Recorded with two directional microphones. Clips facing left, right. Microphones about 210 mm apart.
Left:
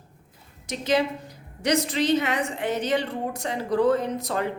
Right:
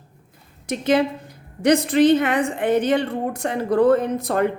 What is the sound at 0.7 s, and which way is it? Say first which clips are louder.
A woman's voice: right 5 dB; 55° right (ahead or behind).